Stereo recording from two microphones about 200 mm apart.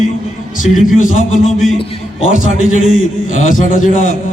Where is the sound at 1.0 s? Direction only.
40° left (ahead or behind).